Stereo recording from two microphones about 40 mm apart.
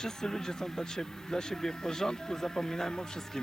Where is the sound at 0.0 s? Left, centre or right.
Centre.